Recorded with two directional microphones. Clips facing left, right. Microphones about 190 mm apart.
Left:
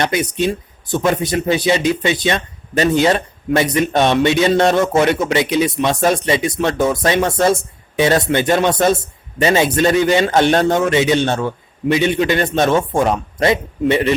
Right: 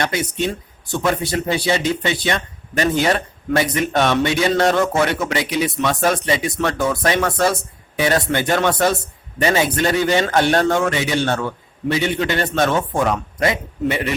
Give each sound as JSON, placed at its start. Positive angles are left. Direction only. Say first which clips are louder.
{"t": 0.0, "sound": "speech", "louder": "left 4 dB", "side_deg": 20}